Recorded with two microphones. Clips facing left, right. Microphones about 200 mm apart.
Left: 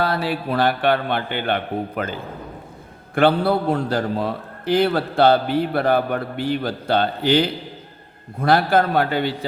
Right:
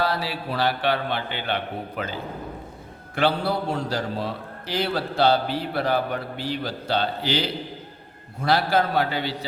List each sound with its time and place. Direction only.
0.0 s a man's voice: 55° left (ahead or behind)
3.2 s a man's voice: 55° left (ahead or behind)